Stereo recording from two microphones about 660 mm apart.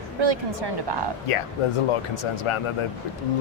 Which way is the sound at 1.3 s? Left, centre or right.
Left.